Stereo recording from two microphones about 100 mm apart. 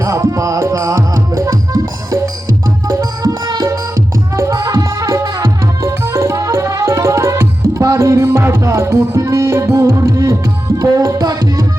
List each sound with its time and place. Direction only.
0.0 s music: 30° right (ahead or behind)